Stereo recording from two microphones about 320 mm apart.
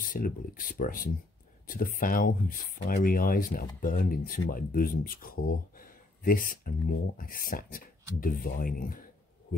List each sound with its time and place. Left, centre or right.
0.0 s speech: left